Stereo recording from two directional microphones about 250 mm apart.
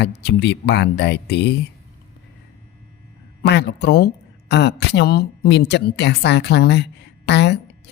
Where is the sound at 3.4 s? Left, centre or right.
Left.